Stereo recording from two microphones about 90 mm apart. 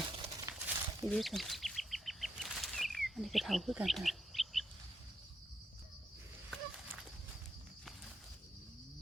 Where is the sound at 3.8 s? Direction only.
Centre (ahead or behind).